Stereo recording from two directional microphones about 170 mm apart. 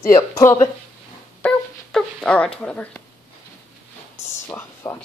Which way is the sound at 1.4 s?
5° left (ahead or behind).